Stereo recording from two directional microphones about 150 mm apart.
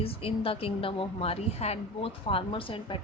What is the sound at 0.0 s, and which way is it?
Speech, 40° left (ahead or behind).